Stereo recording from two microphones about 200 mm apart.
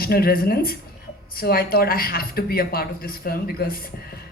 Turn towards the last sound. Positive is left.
turn(degrees=50)  # may be behind; listen again after turning